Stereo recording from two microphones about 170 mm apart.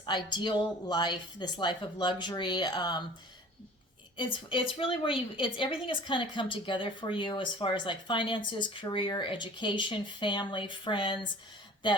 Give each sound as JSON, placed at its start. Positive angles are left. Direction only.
{"t": 0.0, "sound": "a woman's voice", "side_deg": 25}
{"t": 4.2, "sound": "a woman's voice", "side_deg": 30}